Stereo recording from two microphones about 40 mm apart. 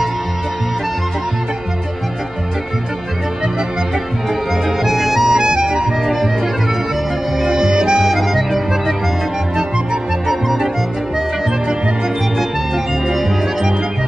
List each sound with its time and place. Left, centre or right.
4.8 s music: centre
5.4 s music: centre
7.4 s music: centre
8.1 s music: centre
10.2 s music: centre
13.1 s music: centre